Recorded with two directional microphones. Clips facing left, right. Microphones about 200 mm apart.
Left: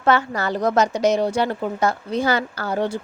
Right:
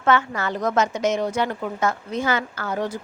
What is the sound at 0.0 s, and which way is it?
A woman's voice, 35° left (ahead or behind).